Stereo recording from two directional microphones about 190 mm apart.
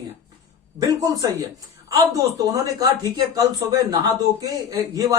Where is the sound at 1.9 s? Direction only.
20° right (ahead or behind).